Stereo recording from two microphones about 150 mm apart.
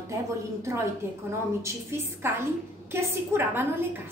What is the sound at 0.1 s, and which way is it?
A woman's voice, 20° right (ahead or behind).